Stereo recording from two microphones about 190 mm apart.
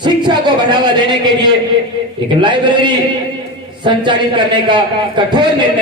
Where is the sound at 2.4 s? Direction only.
25° right (ahead or behind).